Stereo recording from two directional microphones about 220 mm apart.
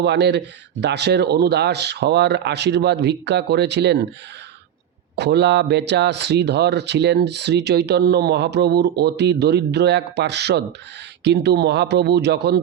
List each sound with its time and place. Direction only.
0.0 s speech: 50° right (ahead or behind)
5.1 s speech: 50° right (ahead or behind)